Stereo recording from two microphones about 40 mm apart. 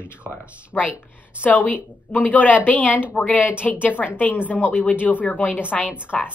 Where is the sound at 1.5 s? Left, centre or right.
Left.